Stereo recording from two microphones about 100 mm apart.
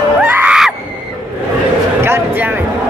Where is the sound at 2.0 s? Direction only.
25° right (ahead or behind).